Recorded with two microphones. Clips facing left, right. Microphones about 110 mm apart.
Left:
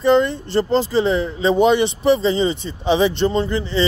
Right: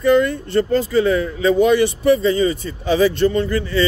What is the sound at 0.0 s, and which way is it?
Speech, 25° left (ahead or behind).